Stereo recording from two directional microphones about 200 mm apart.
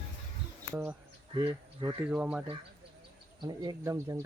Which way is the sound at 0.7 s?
10° right (ahead or behind).